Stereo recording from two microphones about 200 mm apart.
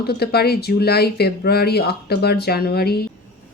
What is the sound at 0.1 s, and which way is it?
A woman's voice, 55° left (ahead or behind).